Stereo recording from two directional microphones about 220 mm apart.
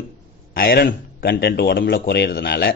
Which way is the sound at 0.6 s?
45° left (ahead or behind).